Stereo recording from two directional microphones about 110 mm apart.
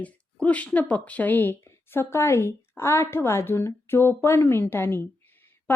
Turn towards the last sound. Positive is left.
turn(degrees=15)  # may be behind; listen again after turning